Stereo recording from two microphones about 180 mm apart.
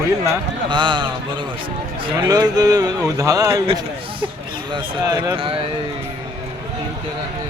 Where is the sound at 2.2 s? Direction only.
20° right (ahead or behind).